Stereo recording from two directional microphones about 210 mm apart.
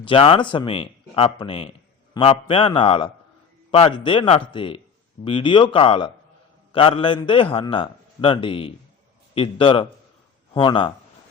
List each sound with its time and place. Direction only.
0.0 s speech: 25° left (ahead or behind)